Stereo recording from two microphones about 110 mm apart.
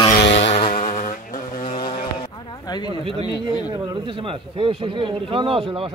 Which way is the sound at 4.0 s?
50° right (ahead or behind).